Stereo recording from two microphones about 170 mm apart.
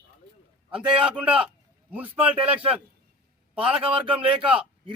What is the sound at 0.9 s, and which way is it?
A man's voice, 5° right (ahead or behind).